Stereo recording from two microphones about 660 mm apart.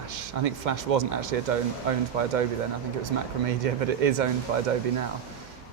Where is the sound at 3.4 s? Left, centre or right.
Right.